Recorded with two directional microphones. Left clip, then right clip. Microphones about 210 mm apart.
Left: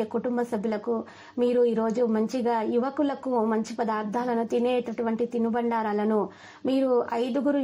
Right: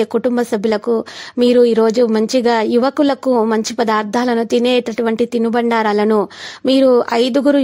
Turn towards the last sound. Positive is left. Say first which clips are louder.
# right 13 dB
turn(degrees=-50)  # may be behind; listen again after turning